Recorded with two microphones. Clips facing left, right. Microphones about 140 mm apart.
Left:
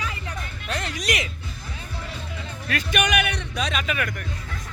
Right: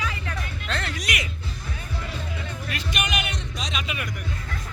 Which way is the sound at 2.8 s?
60° left (ahead or behind).